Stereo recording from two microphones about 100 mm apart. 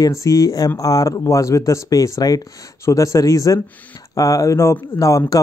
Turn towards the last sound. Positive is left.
turn(degrees=35)  # may be behind; listen again after turning